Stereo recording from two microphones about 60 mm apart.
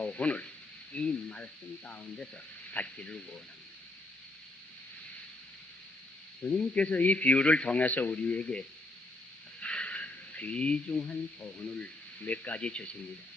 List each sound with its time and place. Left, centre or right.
0.0 s a man's voice: left
2.7 s a man's voice: left
6.5 s a man's voice: centre